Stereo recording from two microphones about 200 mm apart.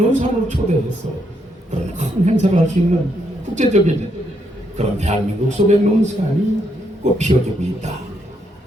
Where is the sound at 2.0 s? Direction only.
35° right (ahead or behind).